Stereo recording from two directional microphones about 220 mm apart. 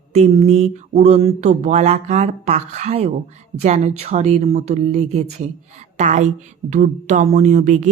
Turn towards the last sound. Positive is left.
turn(degrees=-35)  # may be behind; listen again after turning